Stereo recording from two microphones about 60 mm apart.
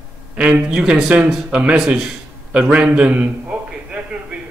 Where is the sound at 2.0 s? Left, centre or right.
Centre.